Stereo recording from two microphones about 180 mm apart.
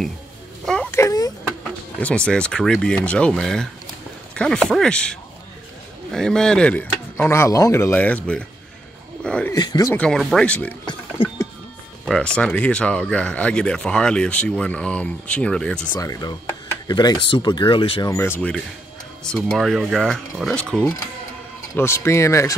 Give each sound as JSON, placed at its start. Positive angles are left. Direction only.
{"t": 0.9, "sound": "vehicle", "side_deg": 20}
{"t": 2.0, "sound": "speech", "side_deg": 5}
{"t": 9.2, "sound": "a sound", "side_deg": 5}
{"t": 9.5, "sound": "speech", "side_deg": 20}
{"t": 9.9, "sound": "speech", "side_deg": 5}
{"t": 11.2, "sound": "music", "side_deg": 30}
{"t": 12.1, "sound": "speech", "side_deg": 5}
{"t": 15.9, "sound": "speech", "side_deg": 20}
{"t": 18.1, "sound": "speech", "side_deg": 15}